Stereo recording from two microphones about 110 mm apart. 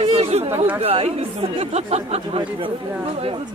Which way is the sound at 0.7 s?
65° right (ahead or behind).